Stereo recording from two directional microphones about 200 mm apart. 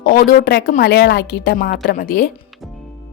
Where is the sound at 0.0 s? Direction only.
45° left (ahead or behind).